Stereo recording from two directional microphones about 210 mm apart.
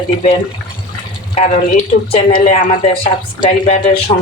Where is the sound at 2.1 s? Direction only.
25° left (ahead or behind).